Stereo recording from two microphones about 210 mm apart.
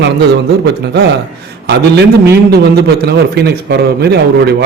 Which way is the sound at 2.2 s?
50° right (ahead or behind).